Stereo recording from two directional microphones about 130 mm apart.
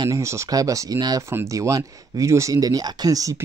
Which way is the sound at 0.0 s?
25° right (ahead or behind).